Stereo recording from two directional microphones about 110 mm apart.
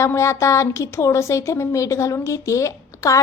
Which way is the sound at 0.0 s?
25° left (ahead or behind).